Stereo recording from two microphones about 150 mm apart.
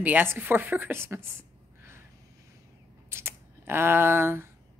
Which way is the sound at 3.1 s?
15° right (ahead or behind).